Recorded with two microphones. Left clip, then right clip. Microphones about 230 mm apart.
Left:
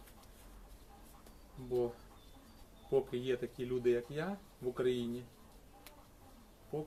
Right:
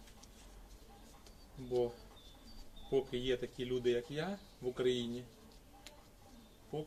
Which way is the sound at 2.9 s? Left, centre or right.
Centre.